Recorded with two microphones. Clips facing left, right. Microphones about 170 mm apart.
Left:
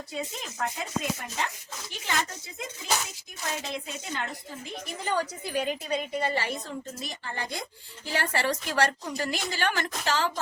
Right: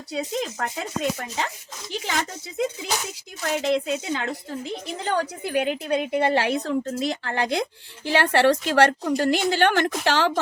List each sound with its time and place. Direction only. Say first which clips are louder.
0.1 s speech: right 11 dB; 75° right (ahead or behind)
3.5 s speech: right 13 dB; 90° right
5.0 s a woman's voice: right 4 dB; 60° right (ahead or behind)